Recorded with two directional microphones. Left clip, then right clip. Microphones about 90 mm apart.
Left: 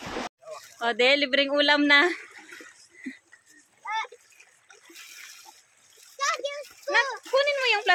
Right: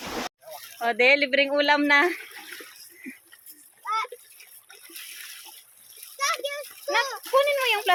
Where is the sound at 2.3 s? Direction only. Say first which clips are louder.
Right 4 dB; 45° right (ahead or behind).